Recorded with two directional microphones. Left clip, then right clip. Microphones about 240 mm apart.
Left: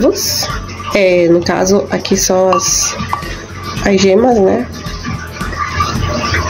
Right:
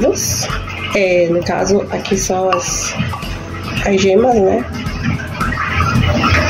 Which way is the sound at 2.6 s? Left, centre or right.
Left.